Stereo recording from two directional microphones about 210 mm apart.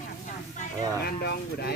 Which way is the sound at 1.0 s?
50° left (ahead or behind).